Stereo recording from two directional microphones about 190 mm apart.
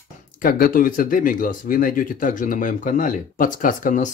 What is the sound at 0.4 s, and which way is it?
Speech, 45° left (ahead or behind).